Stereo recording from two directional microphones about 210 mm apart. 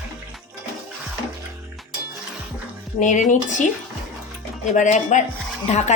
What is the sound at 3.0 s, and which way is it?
Speech, 35° left (ahead or behind).